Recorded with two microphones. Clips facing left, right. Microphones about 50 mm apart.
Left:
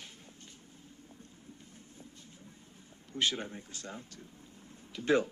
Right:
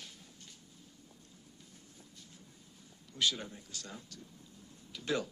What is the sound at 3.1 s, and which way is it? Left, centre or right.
Speech, left.